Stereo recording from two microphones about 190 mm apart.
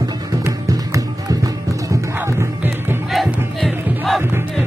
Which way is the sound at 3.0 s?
Centre (ahead or behind).